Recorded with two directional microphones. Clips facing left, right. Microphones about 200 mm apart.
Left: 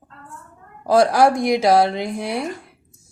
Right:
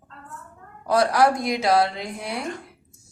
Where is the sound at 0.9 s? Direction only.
30° left (ahead or behind).